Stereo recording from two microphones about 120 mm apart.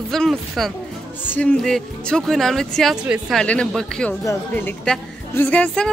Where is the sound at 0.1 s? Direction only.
Centre (ahead or behind).